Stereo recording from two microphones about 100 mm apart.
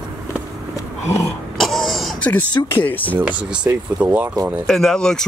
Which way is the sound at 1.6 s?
Centre (ahead or behind).